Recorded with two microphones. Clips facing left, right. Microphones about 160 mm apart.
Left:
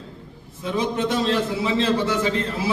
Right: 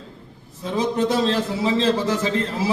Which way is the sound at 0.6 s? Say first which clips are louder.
Right 2 dB; 35° right (ahead or behind).